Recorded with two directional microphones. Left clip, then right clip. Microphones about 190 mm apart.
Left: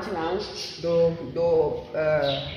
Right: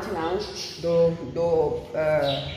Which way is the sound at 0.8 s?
5° left (ahead or behind).